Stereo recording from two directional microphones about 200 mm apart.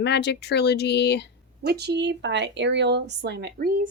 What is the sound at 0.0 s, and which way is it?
Speech, 60° left (ahead or behind).